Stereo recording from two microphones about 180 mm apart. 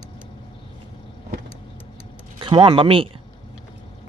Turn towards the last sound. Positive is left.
turn(degrees=-30)  # may be behind; listen again after turning